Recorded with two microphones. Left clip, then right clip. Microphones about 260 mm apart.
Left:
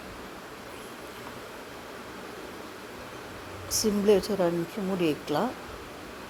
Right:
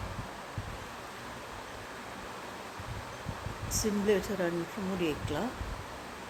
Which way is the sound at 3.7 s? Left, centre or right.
Centre.